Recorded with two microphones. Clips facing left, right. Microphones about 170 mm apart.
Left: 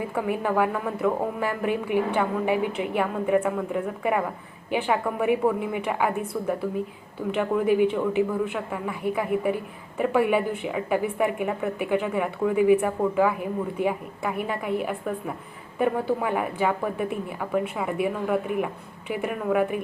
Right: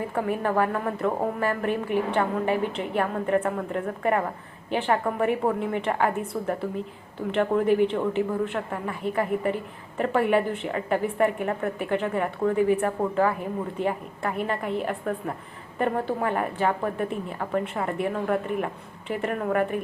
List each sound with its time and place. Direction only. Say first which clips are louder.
0.2 s a woman's voice: even; 10° left (ahead or behind)
6.3 s a woman's voice: left 1 dB; 25° right (ahead or behind)
7.3 s a woman's voice: right 1 dB; 5° left (ahead or behind)